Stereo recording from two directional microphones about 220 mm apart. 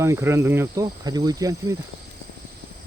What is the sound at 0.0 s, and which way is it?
Cricket, 10° right (ahead or behind).